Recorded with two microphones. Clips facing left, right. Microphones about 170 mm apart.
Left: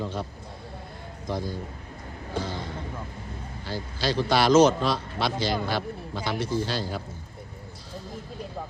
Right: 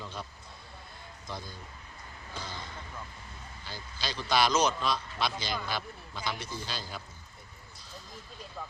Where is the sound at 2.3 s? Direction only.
55° left (ahead or behind).